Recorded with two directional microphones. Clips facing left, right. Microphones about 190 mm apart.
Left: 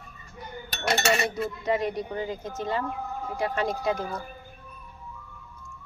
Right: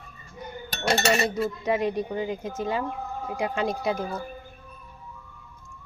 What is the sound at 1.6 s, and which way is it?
Speech, 15° right (ahead or behind).